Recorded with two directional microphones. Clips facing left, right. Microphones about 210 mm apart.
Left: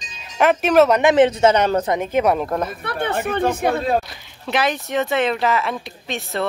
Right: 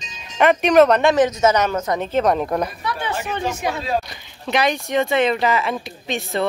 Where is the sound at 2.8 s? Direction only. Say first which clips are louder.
Left 3 dB; 55° left (ahead or behind).